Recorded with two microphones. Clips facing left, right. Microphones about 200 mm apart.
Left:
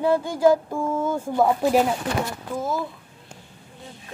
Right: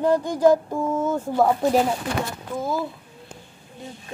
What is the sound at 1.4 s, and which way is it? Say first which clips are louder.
Speech: even; 5° left (ahead or behind).